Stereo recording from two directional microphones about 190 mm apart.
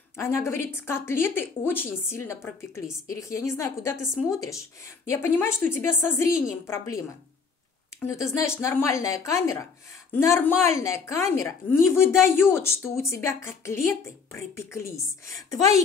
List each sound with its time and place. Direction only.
0.1 s a woman's voice: 15° left (ahead or behind)
4.0 s speech: 5° right (ahead or behind)
4.4 s a woman's voice: 15° left (ahead or behind)
8.4 s a woman's voice: 15° left (ahead or behind)